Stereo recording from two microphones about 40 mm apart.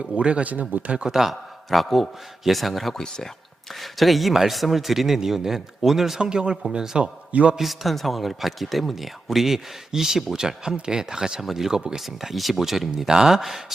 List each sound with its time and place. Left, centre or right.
0.0 s speech: right
1.0 s speech: centre
6.1 s speech: right
6.6 s speech: centre
7.0 s a man's voice: right
7.6 s speech: centre
12.0 s speech: centre